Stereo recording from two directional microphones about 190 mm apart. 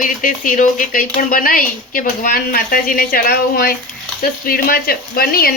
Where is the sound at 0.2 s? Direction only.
45° left (ahead or behind).